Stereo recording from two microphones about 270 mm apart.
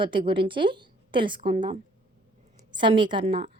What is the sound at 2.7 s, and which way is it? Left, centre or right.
Speech, centre.